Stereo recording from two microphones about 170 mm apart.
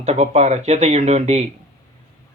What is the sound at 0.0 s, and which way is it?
A man's voice, 40° right (ahead or behind).